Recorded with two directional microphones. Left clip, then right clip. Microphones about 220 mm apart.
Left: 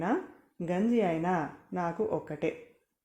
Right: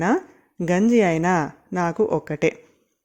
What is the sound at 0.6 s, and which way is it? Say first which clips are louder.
Speech: right 10 dB; 45° right (ahead or behind).